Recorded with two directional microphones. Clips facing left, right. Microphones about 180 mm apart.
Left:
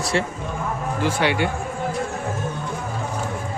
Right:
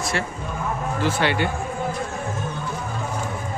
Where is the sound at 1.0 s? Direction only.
10° left (ahead or behind).